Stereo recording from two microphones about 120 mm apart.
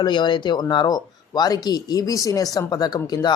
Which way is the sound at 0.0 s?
40° left (ahead or behind).